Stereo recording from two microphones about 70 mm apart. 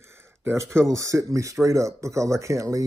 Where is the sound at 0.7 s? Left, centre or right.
Right.